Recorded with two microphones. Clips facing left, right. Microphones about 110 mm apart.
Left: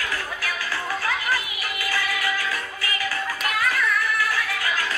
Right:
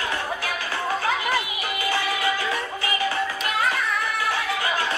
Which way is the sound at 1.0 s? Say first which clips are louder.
Right 2 dB; 25° right (ahead or behind).